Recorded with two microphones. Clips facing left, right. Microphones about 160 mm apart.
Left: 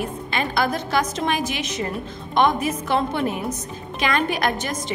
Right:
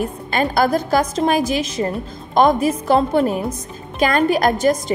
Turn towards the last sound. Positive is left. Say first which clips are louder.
# right 8 dB
turn(degrees=-40)  # may be behind; listen again after turning